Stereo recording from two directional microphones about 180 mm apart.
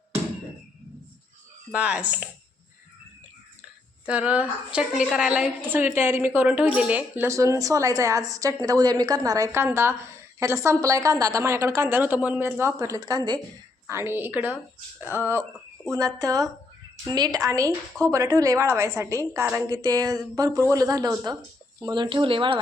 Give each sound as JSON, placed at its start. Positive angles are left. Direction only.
{"t": 1.7, "sound": "a woman's voice", "side_deg": -5}
{"t": 4.0, "sound": "a woman's voice", "side_deg": -5}
{"t": 15.9, "sound": "a woman's voice", "side_deg": -20}